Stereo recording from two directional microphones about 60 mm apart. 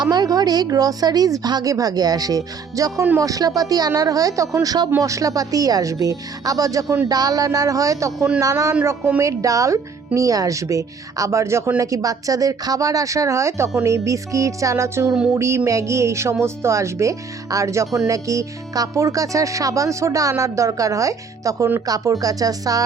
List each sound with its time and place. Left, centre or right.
0.2 s speech: right
4.9 s speech: right
7.1 s speech: right
11.8 s speech: right
15.3 s speech: right
21.8 s speech: right